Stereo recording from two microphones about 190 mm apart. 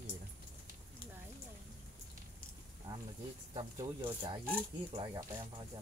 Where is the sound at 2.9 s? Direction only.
15° right (ahead or behind).